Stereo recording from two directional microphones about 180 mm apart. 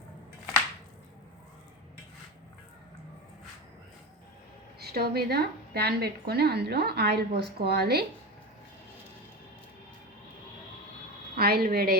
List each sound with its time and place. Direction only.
4.8 s a woman's voice: 60° right (ahead or behind)
11.3 s a woman's voice: 60° right (ahead or behind)